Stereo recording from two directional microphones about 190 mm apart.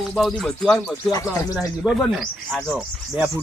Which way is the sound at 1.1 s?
20° left (ahead or behind).